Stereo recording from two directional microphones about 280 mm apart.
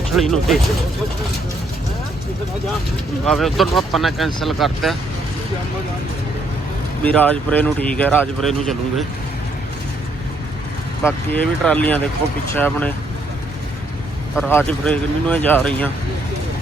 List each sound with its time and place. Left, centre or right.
0.2 s speech: centre
3.2 s speech: centre
7.0 s speech: centre
11.0 s speech: centre
14.3 s speech: centre